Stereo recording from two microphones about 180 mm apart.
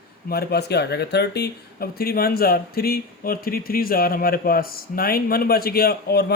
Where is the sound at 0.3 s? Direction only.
60° left (ahead or behind).